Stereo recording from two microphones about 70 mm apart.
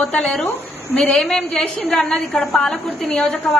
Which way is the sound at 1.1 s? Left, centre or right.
Centre.